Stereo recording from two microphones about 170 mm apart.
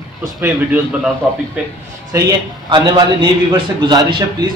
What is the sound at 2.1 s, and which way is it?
A man's voice, 25° right (ahead or behind).